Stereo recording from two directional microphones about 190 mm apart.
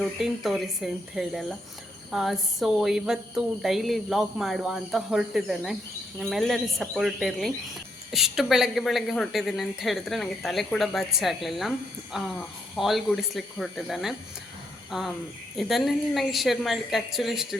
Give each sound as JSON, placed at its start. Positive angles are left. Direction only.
{"t": 0.0, "sound": "speech", "side_deg": 0}
{"t": 14.8, "sound": "cricket", "side_deg": 0}
{"t": 15.5, "sound": "speech", "side_deg": 0}